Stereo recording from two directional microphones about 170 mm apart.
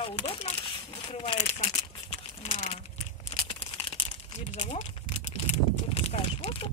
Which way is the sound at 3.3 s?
35° left (ahead or behind).